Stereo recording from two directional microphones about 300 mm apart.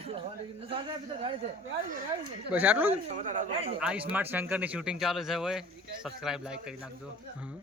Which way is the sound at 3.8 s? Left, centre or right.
Centre.